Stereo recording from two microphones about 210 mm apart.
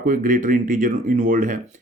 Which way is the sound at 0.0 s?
40° right (ahead or behind).